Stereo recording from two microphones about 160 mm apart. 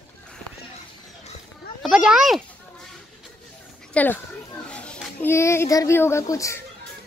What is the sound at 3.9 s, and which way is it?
A child's voice, 10° left (ahead or behind).